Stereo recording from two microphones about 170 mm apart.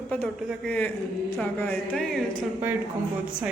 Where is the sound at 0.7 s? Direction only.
10° left (ahead or behind).